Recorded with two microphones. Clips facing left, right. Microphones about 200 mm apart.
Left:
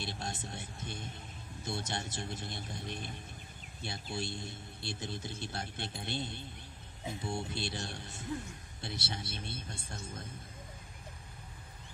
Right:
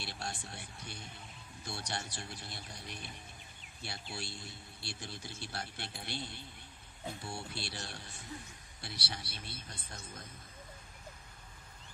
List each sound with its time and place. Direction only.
0.0 s speech: 20° left (ahead or behind)